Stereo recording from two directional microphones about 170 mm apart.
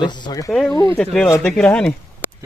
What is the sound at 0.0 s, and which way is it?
Speech, 25° left (ahead or behind).